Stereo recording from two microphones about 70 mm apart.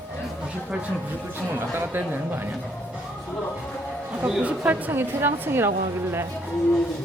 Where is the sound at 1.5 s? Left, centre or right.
Right.